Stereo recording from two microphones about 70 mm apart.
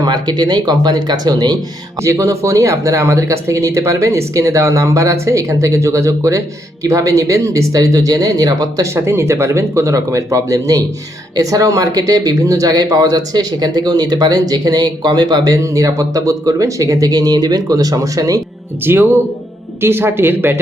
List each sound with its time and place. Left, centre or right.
0.0 s speech: right
2.0 s speech: right
8.8 s speech: right
15.6 s speech: right
18.9 s speech: right